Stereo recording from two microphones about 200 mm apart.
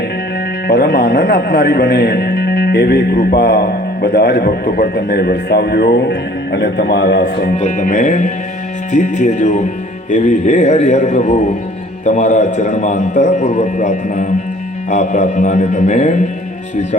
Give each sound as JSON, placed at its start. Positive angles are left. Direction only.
{"t": 0.7, "sound": "speech", "side_deg": 55}
{"t": 7.6, "sound": "speech", "side_deg": 40}